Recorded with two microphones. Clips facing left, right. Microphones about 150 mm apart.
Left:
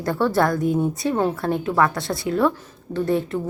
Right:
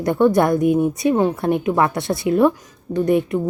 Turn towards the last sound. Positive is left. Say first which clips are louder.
# right 4 dB
turn(degrees=-15)  # may be behind; listen again after turning